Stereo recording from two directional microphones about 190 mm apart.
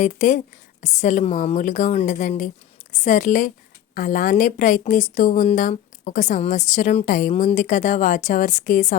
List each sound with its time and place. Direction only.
0.0 s a woman's voice: 40° left (ahead or behind)